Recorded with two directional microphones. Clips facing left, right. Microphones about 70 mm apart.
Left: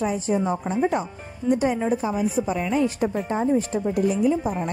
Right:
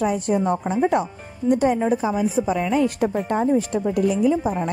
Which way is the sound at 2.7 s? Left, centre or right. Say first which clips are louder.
Right 1 dB; right.